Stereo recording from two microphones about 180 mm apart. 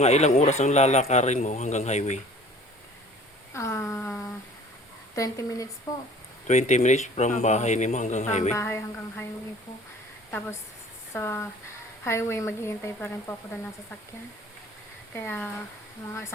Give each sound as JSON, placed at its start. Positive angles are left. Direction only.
{"t": 0.0, "sound": "a man's voice", "side_deg": 40}
{"t": 3.5, "sound": "a sound", "side_deg": 15}
{"t": 5.1, "sound": "speech", "side_deg": 20}
{"t": 6.5, "sound": "a man's voice", "side_deg": 40}
{"t": 8.5, "sound": "speech", "side_deg": 15}
{"t": 11.1, "sound": "speech", "side_deg": 15}
{"t": 15.1, "sound": "speech", "side_deg": 10}